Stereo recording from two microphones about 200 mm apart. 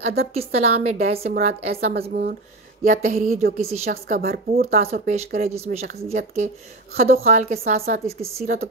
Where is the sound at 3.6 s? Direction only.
30° right (ahead or behind).